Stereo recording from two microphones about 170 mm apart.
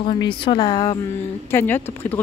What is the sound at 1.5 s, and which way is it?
Speech, 10° left (ahead or behind).